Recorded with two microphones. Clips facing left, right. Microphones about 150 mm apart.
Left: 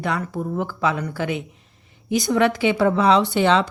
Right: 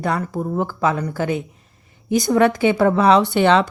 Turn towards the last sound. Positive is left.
turn(degrees=-60)  # may be behind; listen again after turning